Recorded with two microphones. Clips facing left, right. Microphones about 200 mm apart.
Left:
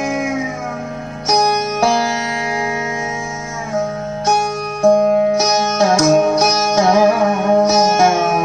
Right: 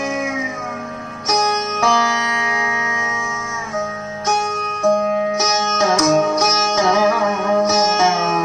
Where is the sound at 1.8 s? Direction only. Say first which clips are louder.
Left 2 dB; 35° left (ahead or behind).